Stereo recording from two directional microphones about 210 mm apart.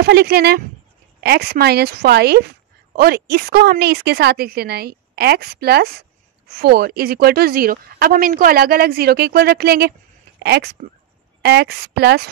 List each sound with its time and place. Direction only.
0.0 s speech: 50° right (ahead or behind)